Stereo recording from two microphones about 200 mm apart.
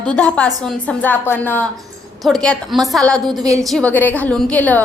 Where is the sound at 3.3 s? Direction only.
20° right (ahead or behind).